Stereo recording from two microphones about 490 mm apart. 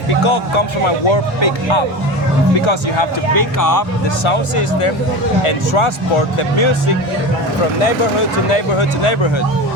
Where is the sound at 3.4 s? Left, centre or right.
Left.